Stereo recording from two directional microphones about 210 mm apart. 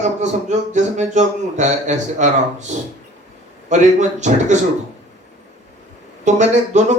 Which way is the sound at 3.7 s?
35° right (ahead or behind).